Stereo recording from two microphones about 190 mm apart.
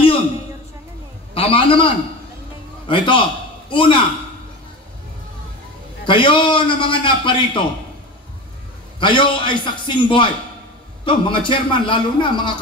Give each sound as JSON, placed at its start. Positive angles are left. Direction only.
{"t": 1.3, "sound": "a man's voice", "side_deg": 30}
{"t": 2.9, "sound": "a man's voice", "side_deg": 25}
{"t": 6.0, "sound": "a man's voice", "side_deg": 25}
{"t": 9.0, "sound": "a man's voice", "side_deg": 25}